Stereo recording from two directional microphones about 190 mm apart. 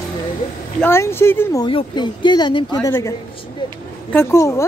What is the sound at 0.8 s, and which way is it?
Speech, 10° left (ahead or behind).